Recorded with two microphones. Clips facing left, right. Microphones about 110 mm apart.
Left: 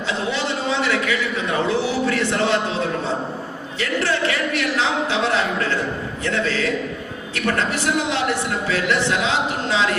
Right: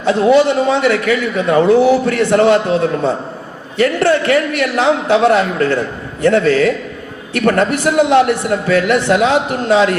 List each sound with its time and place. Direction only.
0.0 s a man's voice: 55° right (ahead or behind)
3.8 s a man's voice: 50° right (ahead or behind)